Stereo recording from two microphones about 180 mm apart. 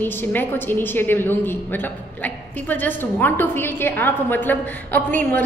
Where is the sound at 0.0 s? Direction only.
10° left (ahead or behind).